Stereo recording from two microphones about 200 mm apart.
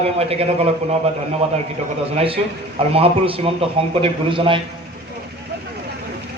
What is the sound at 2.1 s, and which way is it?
A man's voice, 30° right (ahead or behind).